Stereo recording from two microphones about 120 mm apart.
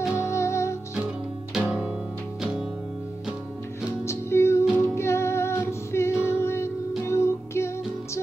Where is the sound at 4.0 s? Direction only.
20° left (ahead or behind).